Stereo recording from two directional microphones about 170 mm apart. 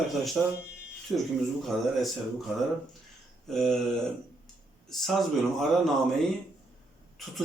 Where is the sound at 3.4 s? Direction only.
Centre (ahead or behind).